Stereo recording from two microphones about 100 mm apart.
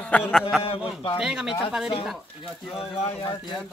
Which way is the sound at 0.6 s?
70° left (ahead or behind).